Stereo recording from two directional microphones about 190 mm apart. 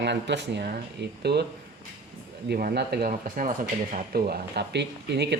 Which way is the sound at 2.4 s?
55° right (ahead or behind).